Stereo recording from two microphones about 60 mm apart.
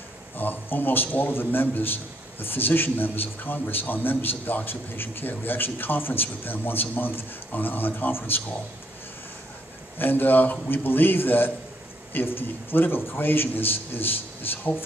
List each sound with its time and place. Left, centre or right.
0.4 s a man's voice: left
9.9 s a man's voice: left